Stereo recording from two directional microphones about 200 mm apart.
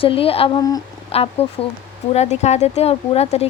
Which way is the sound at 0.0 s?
25° left (ahead or behind).